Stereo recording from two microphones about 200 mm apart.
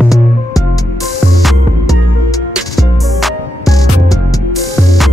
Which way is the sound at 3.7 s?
15° left (ahead or behind).